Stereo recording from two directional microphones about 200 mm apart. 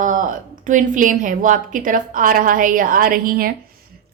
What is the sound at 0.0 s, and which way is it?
A woman's voice, 40° right (ahead or behind).